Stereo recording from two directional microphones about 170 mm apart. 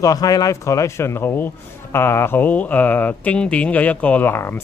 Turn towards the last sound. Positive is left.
turn(degrees=15)  # may be behind; listen again after turning